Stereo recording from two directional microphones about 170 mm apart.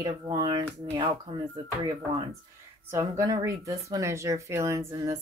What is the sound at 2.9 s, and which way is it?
Speech, 15° right (ahead or behind).